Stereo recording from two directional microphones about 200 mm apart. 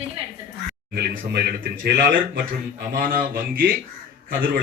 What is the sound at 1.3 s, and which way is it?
Speech, 50° right (ahead or behind).